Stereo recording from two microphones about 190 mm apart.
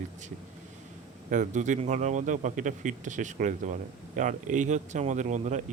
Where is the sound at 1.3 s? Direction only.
40° right (ahead or behind).